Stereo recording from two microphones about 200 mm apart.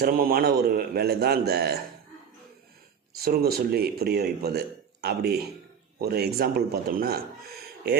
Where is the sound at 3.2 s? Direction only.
50° right (ahead or behind).